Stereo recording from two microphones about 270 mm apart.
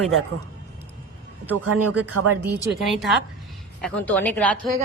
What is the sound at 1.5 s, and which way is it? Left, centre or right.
Speech, right.